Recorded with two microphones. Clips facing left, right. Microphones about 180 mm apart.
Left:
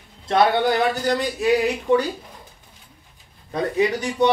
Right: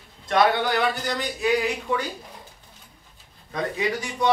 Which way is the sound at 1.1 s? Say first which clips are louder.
Left 4 dB; 35° left (ahead or behind).